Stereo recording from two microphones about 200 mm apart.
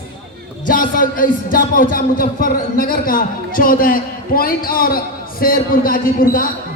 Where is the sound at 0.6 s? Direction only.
45° left (ahead or behind).